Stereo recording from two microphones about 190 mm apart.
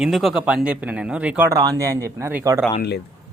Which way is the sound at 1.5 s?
15° right (ahead or behind).